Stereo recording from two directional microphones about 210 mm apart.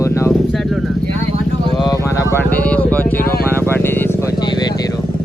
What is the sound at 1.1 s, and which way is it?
Vehicle, 30° right (ahead or behind).